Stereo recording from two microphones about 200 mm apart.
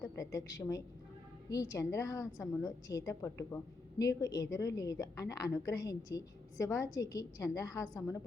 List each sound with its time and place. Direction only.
0.0 s a woman's voice: 15° left (ahead or behind)